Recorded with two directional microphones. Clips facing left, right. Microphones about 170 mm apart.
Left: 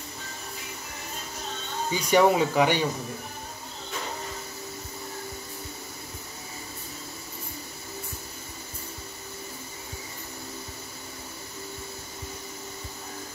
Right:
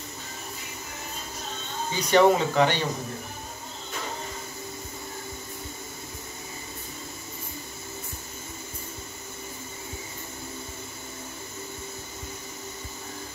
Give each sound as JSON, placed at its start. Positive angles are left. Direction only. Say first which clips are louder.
{"t": 2.0, "sound": "speech", "louder": "right 1 dB", "side_deg": 10}